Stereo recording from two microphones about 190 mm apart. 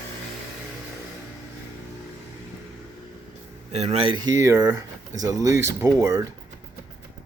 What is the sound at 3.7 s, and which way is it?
Speech, 35° right (ahead or behind).